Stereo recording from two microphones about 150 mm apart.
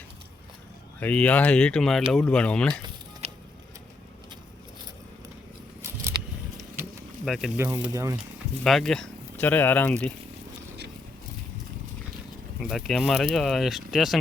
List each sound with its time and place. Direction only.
0.9 s speech: 10° left (ahead or behind)
7.3 s speech: centre (ahead or behind)
7.5 s speech: 15° right (ahead or behind)
8.6 s speech: 5° left (ahead or behind)
12.5 s speech: centre (ahead or behind)